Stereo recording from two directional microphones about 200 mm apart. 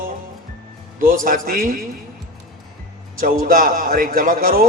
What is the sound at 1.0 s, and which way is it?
Speech, 45° right (ahead or behind).